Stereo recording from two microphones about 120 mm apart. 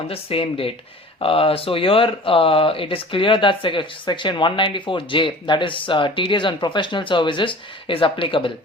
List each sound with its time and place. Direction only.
0.1 s speech: 50° left (ahead or behind)